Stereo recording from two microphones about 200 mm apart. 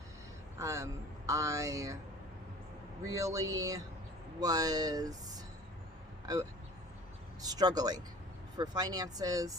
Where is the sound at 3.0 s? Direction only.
15° right (ahead or behind).